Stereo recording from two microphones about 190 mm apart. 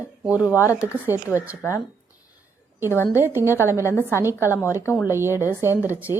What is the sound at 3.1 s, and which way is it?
Speech, 10° right (ahead or behind).